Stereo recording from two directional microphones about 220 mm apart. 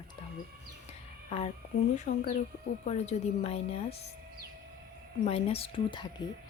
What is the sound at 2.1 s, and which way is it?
A woman's voice, 35° left (ahead or behind).